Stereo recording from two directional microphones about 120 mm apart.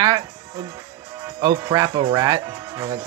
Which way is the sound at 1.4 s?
30° right (ahead or behind).